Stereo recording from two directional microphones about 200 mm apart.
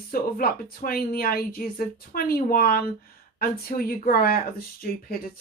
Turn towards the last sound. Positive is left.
turn(degrees=50)  # may be behind; listen again after turning